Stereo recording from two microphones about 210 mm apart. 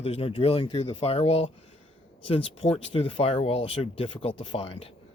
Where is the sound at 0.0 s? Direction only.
30° left (ahead or behind).